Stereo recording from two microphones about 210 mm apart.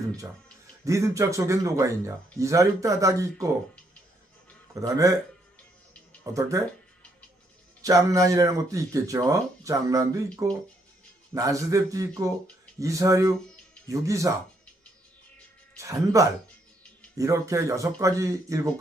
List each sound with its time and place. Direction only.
0.9 s speech: 15° right (ahead or behind)
4.7 s speech: 15° right (ahead or behind)
6.3 s speech: 15° right (ahead or behind)
7.8 s speech: 15° right (ahead or behind)
15.8 s speech: 15° right (ahead or behind)